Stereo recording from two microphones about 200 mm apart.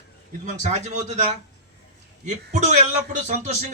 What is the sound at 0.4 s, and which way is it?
Speech, 35° right (ahead or behind).